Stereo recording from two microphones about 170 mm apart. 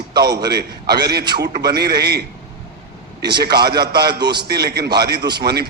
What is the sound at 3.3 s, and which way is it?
Speech, 70° right (ahead or behind).